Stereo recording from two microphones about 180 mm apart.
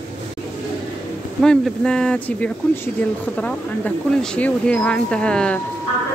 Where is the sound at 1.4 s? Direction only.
5° left (ahead or behind).